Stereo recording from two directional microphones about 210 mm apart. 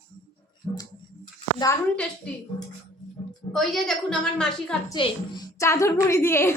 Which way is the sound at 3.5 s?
Centre (ahead or behind).